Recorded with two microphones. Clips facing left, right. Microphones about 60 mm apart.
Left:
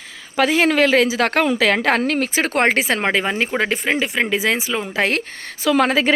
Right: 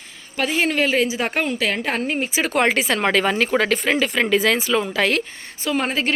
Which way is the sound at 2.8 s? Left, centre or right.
Left.